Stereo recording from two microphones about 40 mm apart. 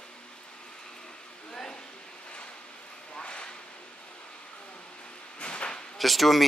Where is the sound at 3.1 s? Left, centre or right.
Left.